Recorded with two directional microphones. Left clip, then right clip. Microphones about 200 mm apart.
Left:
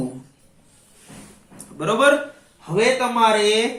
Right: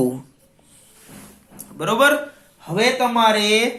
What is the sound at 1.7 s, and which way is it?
A woman's voice, 50° right (ahead or behind).